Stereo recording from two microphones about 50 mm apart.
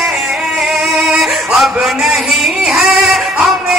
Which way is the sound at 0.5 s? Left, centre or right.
Centre.